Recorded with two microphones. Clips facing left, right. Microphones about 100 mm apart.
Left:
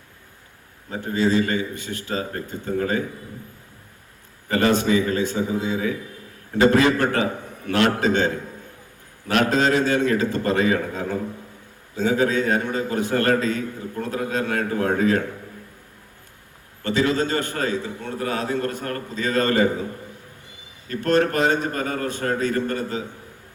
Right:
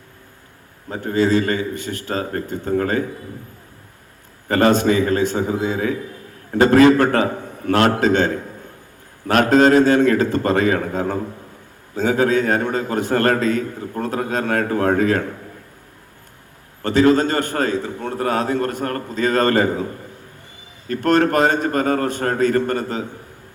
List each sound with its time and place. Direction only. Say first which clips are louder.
0.9 s a man's voice: right 4 dB; 50° right (ahead or behind)
1.3 s a man's voice: right 3 dB; 40° right (ahead or behind)
4.4 s a man's voice: right 4 dB; 45° right (ahead or behind)
16.9 s a man's voice: right 6 dB; 45° right (ahead or behind)
20.8 s a man's voice: right 3 dB; 55° right (ahead or behind)